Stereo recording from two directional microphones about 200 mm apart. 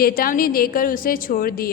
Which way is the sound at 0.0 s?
45° left (ahead or behind).